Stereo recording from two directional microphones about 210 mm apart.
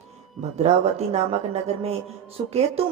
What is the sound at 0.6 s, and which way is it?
A woman's voice, 30° right (ahead or behind).